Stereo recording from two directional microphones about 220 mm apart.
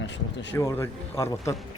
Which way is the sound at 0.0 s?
55° left (ahead or behind).